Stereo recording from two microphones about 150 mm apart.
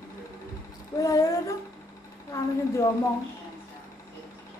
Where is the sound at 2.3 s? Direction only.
20° left (ahead or behind).